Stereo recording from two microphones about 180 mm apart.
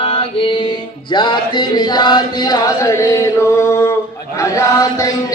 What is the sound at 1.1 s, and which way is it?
Chant, 25° left (ahead or behind).